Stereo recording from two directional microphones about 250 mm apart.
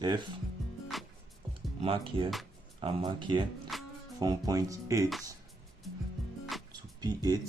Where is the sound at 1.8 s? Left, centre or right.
Right.